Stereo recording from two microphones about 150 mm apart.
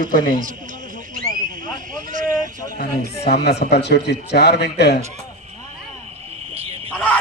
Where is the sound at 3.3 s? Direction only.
90° left.